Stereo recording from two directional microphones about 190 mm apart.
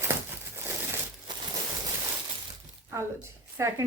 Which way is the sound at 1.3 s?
25° right (ahead or behind).